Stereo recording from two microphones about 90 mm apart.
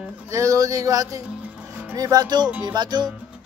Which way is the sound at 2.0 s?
45° right (ahead or behind).